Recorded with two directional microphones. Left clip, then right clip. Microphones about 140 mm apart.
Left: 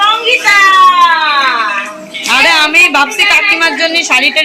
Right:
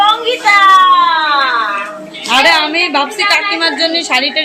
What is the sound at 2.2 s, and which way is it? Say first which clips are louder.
A woman's voice: left 2 dB; centre (ahead or behind).